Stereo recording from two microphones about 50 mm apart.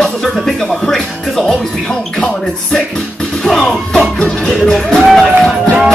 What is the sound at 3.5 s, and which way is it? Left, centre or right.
Music, centre.